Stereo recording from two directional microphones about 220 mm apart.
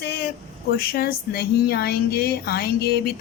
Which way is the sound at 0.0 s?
45° left (ahead or behind).